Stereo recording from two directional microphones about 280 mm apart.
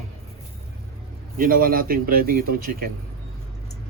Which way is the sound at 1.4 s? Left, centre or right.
Right.